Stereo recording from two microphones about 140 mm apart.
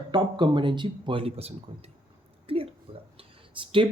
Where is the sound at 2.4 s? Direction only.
40° right (ahead or behind).